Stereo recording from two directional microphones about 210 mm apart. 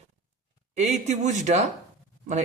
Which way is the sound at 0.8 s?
35° right (ahead or behind).